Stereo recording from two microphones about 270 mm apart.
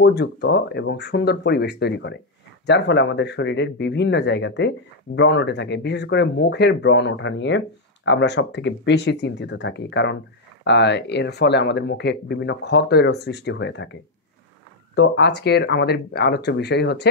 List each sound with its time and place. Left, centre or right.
0.0 s speech: left
15.0 s speech: left